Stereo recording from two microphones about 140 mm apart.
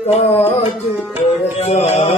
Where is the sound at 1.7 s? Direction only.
50° left (ahead or behind).